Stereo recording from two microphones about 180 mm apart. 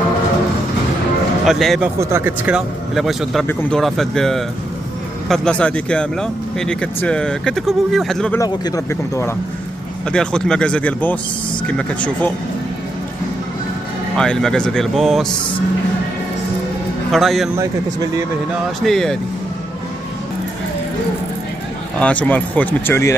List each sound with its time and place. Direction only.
1.4 s speech: centre (ahead or behind)
2.0 s speech: 15° right (ahead or behind); by 8.4 s 5° left (ahead or behind)
8.4 s speech: 20° left (ahead or behind)
10.1 s speech: 5° left (ahead or behind)
14.1 s speech: 5° left (ahead or behind)
17.1 s speech: centre (ahead or behind)
18.9 s speech: centre (ahead or behind)
22.0 s speech: 10° left (ahead or behind)